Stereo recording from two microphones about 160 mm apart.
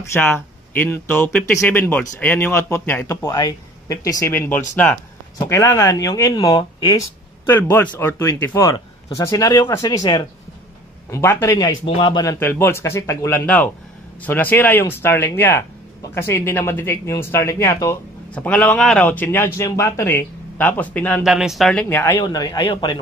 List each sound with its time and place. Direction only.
0.0 s speech: 15° left (ahead or behind)
5.4 s speech: 20° left (ahead or behind)
7.4 s speech: 15° left (ahead or behind)
8.6 s speech: 25° left (ahead or behind)
11.1 s speech: 15° left (ahead or behind)
21.2 s speech: 5° right (ahead or behind)
21.8 s speech: 10° left (ahead or behind)
22.2 s speech: 25° left (ahead or behind)